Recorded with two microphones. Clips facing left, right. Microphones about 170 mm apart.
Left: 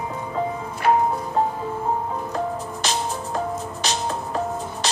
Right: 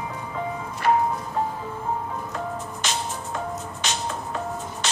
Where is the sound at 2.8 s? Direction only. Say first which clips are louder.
Left 4 dB; 35° left (ahead or behind).